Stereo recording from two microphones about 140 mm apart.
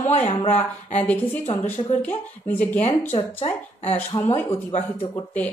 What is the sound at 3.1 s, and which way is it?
Speech, 45° left (ahead or behind).